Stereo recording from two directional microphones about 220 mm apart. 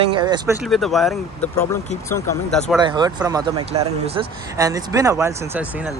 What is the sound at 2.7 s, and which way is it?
Speech, 20° right (ahead or behind).